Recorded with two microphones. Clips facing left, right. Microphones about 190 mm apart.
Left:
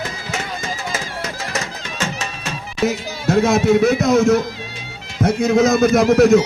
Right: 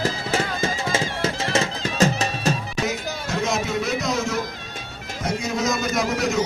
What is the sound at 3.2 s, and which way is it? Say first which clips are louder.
Speech: left 11 dB; 55° left (ahead or behind).